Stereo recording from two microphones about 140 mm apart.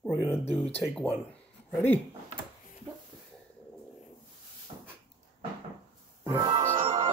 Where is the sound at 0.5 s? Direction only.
45° left (ahead or behind).